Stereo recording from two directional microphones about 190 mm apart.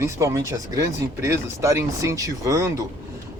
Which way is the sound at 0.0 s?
15° right (ahead or behind).